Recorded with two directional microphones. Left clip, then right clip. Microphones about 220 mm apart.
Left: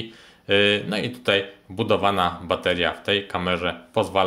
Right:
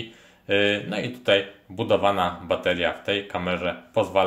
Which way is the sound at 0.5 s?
25° left (ahead or behind).